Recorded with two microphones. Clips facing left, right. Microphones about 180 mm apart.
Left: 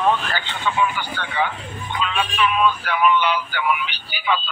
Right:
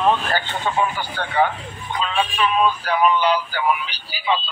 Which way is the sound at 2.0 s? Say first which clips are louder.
Even; 35° right (ahead or behind).